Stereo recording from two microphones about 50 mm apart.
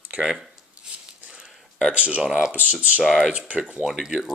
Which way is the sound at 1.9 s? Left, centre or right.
Right.